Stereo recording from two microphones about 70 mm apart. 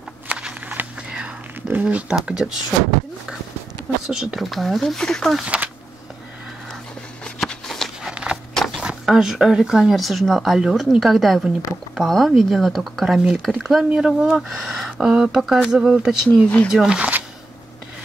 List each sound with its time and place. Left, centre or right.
0.3 s walk: centre
1.7 s speech: right
4.1 s speech: centre
5.3 s speech: centre
7.2 s a sound: centre
8.0 s walk: centre
8.5 s a sound: centre
8.8 s speech: centre